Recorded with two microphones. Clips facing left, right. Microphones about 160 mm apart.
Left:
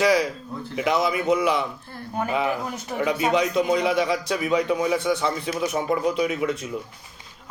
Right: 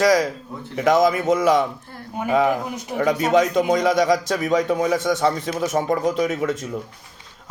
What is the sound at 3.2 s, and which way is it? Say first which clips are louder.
A man's voice: right 3 dB; 40° right (ahead or behind).